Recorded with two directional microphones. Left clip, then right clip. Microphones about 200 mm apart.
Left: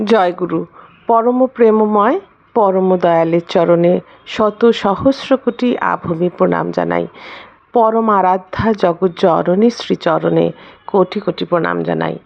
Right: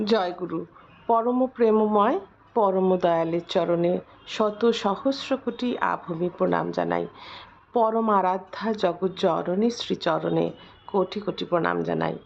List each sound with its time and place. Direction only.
0.0 s a woman's voice: 30° left (ahead or behind)